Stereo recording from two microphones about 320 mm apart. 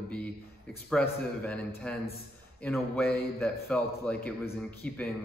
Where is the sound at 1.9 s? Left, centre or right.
Centre.